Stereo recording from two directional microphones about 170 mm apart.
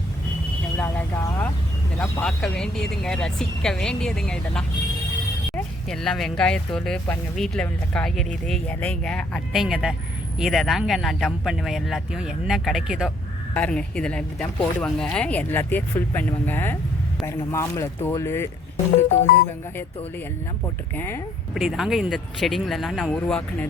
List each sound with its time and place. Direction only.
0.8 s vehicle: 15° left (ahead or behind)
2.2 s speech: 5° left (ahead or behind)
19.0 s speech: 40° left (ahead or behind)
20.9 s speech: 15° left (ahead or behind)
21.5 s speech: centre (ahead or behind)